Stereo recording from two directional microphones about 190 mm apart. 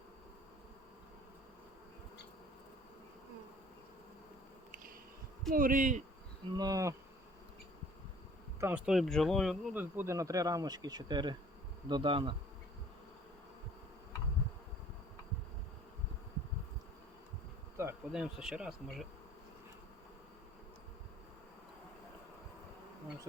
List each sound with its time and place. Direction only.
5.5 s speech: 45° right (ahead or behind)
6.5 s insect: 20° right (ahead or behind)
8.6 s speech: 5° right (ahead or behind); by 11.3 s 20° right (ahead or behind)
11.9 s insect: 25° right (ahead or behind)
17.8 s insect: 15° right (ahead or behind)
18.1 s insect: 5° right (ahead or behind)